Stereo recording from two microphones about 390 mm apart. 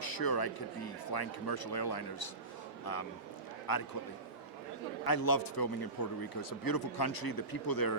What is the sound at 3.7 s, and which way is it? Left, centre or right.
Speech, left.